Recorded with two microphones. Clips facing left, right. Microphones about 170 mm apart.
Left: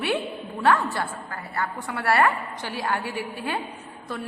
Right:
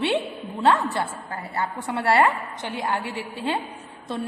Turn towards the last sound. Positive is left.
turn(degrees=-25)  # may be behind; listen again after turning